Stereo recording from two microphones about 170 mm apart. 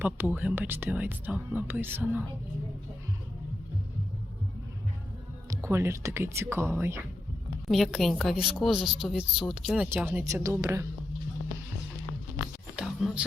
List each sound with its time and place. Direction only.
0.0 s speech: 10° right (ahead or behind)
5.5 s speech: 15° right (ahead or behind)
7.7 s a woman's voice: centre (ahead or behind); by 10.8 s 15° right (ahead or behind)
12.7 s whispering: 5° right (ahead or behind)